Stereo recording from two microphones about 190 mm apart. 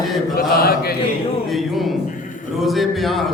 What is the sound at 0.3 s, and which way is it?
Mantra, 50° left (ahead or behind).